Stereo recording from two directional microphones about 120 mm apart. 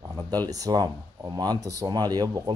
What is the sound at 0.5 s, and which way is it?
Speech, 30° right (ahead or behind).